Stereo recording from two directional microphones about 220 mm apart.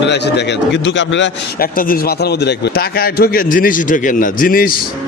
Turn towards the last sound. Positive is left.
turn(degrees=40)  # may be behind; listen again after turning